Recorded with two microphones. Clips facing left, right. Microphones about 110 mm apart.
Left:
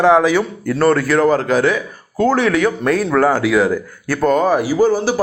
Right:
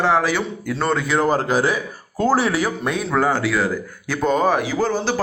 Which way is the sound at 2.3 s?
35° right (ahead or behind).